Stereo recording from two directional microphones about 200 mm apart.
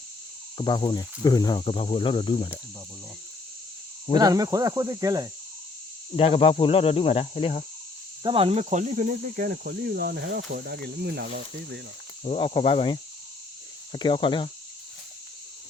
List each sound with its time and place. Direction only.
0.5 s speech: 20° left (ahead or behind)
4.2 s speech: 20° right (ahead or behind)
6.1 s speech: 30° left (ahead or behind)
8.2 s cricket: 25° right (ahead or behind); by 11.3 s 50° right (ahead or behind)
12.2 s speech: 30° left (ahead or behind)